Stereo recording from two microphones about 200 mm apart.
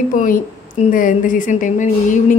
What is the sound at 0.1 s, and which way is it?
A woman's voice, 40° left (ahead or behind).